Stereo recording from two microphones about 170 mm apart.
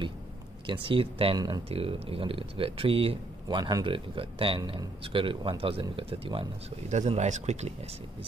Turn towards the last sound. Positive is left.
turn(degrees=-40)  # may be behind; listen again after turning